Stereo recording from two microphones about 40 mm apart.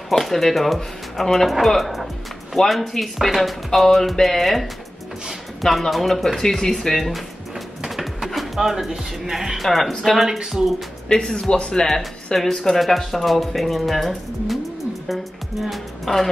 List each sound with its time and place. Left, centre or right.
0.1 s speech: centre
7.1 s music: centre
8.5 s speech: centre
9.7 s speech: centre
12.4 s speech: centre
16.1 s speech: centre